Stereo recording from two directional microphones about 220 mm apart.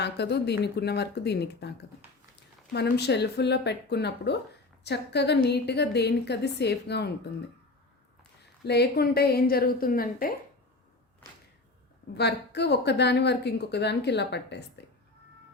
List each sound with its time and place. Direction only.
0.0 s a woman's voice: 50° left (ahead or behind)
8.6 s a woman's voice: 50° left (ahead or behind)
12.1 s a woman's voice: 50° left (ahead or behind)